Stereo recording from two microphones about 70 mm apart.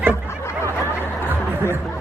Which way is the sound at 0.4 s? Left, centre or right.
Left.